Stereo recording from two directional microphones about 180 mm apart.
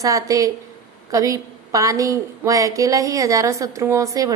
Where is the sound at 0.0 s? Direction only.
20° right (ahead or behind).